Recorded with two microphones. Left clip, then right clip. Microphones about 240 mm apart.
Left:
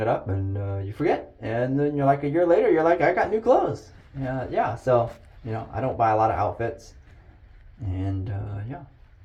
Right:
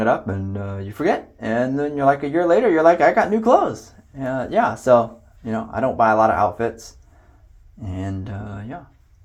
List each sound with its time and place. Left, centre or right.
0.5 s speech: right
7.9 s speech: right